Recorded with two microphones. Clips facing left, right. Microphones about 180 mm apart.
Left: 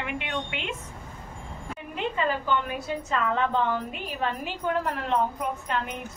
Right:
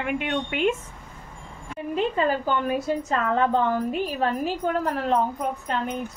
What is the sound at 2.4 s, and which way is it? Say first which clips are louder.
A woman's voice: right 4 dB; 40° right (ahead or behind).